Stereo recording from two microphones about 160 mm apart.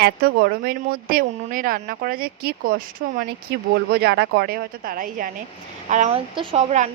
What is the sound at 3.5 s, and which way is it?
A woman's voice, 85° right.